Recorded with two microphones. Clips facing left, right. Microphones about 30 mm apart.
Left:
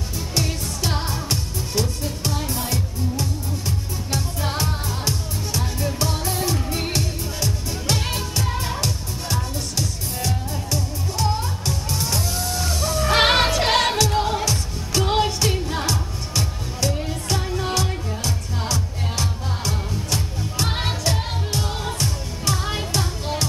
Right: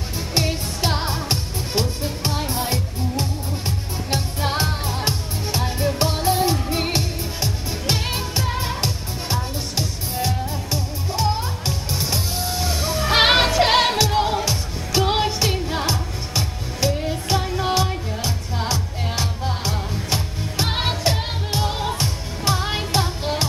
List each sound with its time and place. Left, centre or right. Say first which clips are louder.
0.3 s music: right 3 dB; right